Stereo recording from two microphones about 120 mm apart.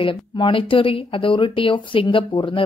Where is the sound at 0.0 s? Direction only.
45° left (ahead or behind).